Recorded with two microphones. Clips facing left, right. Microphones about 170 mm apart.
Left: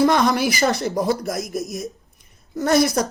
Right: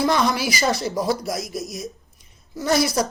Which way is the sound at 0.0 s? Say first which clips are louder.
Left 3 dB; 55° left (ahead or behind).